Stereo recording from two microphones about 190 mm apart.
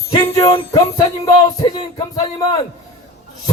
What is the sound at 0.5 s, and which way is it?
A man's voice, 30° left (ahead or behind).